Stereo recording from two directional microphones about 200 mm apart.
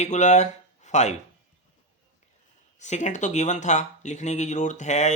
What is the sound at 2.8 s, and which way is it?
Speech, 35° left (ahead or behind).